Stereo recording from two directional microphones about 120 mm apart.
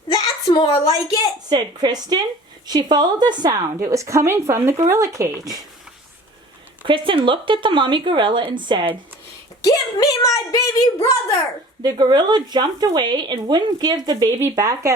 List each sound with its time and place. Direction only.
0.1 s a sound: 35° left (ahead or behind)
1.5 s speech: 35° right (ahead or behind)
6.8 s speech: 45° right (ahead or behind)
9.6 s speech: 30° left (ahead or behind)
11.8 s speech: 35° right (ahead or behind)
14.3 s speech: 20° right (ahead or behind)